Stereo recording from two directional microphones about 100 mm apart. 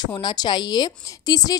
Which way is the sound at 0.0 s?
45° left (ahead or behind).